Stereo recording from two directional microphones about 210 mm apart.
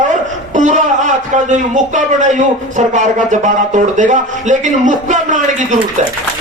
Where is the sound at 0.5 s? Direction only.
35° right (ahead or behind).